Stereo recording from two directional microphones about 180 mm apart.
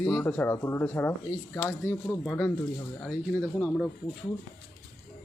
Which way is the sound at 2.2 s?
Centre (ahead or behind).